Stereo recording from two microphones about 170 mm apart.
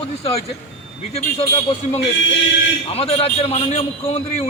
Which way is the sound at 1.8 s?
45° left (ahead or behind).